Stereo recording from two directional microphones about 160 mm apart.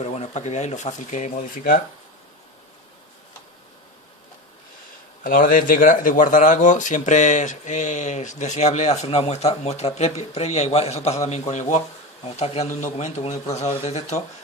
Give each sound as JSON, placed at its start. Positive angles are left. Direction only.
{"t": 0.0, "sound": "speech", "side_deg": 45}
{"t": 5.2, "sound": "speech", "side_deg": 60}